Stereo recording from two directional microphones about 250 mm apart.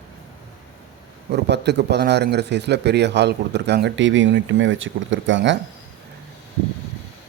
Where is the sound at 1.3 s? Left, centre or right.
Right.